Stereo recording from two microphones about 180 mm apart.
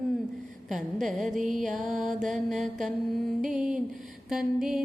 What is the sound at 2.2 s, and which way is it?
Music, centre (ahead or behind).